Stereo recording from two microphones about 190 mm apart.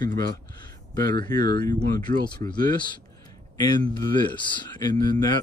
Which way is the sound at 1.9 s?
25° left (ahead or behind).